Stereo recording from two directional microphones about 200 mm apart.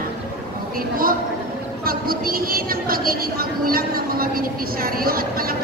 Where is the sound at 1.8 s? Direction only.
45° right (ahead or behind).